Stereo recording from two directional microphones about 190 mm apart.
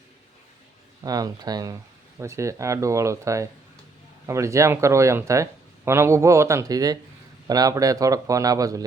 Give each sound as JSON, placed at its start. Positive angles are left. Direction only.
{"t": 1.0, "sound": "speech", "side_deg": -20}